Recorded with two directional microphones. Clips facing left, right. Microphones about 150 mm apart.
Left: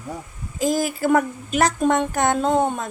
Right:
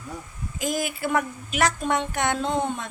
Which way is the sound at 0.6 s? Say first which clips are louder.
Left 6 dB; 35° left (ahead or behind).